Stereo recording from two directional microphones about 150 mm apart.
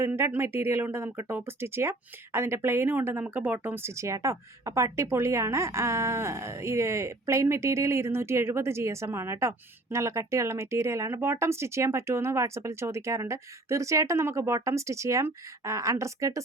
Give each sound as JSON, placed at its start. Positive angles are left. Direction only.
{"t": 0.0, "sound": "speech", "side_deg": -15}